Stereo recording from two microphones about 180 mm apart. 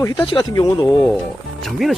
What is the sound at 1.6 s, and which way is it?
Speech, centre (ahead or behind).